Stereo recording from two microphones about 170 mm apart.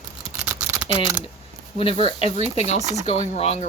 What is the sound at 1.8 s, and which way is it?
Speech, 30° left (ahead or behind).